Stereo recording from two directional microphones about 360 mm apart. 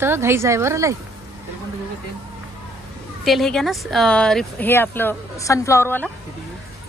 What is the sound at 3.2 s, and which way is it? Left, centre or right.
Speech, centre.